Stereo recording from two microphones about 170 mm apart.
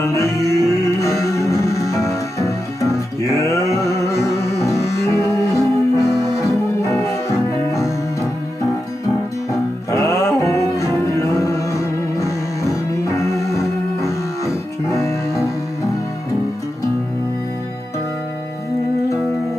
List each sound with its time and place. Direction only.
0.1 s music: 15° left (ahead or behind)
9.5 s music: 20° left (ahead or behind)